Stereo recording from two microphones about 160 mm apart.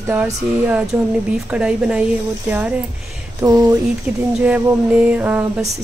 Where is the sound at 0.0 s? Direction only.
10° right (ahead or behind).